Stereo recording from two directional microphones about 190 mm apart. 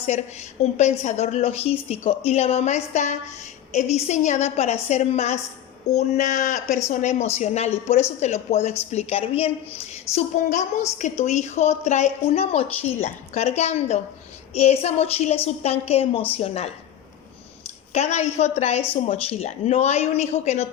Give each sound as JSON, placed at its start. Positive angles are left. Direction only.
{"t": 0.0, "sound": "a woman's voice", "side_deg": 35}
{"t": 17.9, "sound": "a woman's voice", "side_deg": 35}